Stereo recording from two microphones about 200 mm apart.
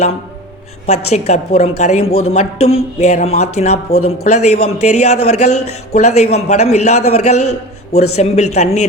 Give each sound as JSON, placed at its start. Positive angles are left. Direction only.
{"t": 1.1, "sound": "a man's voice", "side_deg": 35}